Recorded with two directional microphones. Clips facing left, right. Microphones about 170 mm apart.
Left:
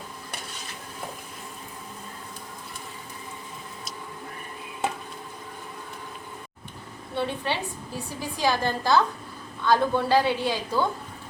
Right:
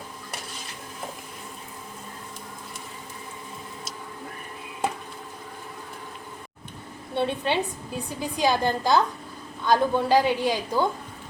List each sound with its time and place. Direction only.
7.2 s a woman's voice: 20° right (ahead or behind)